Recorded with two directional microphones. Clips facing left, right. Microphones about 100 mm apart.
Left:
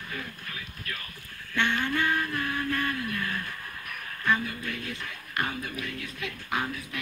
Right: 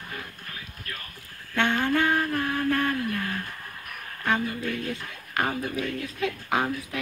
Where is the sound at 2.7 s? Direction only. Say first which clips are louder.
Right 4 dB; 65° right (ahead or behind).